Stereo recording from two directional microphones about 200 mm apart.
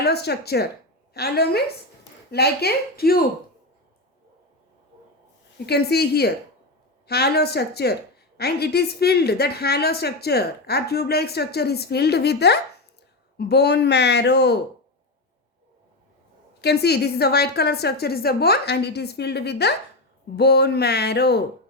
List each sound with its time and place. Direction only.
0.0 s a woman's voice: 55° left (ahead or behind)
5.6 s a woman's voice: 55° left (ahead or behind)
16.6 s a woman's voice: 55° left (ahead or behind)